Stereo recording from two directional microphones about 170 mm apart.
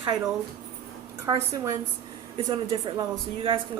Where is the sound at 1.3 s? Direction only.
15° right (ahead or behind).